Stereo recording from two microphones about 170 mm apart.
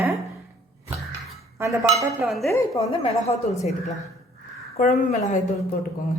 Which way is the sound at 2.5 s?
15° left (ahead or behind).